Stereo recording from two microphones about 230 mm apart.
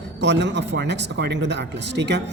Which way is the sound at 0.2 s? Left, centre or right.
Right.